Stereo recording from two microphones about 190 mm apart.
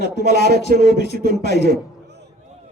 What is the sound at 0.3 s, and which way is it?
A man's voice, 55° right (ahead or behind).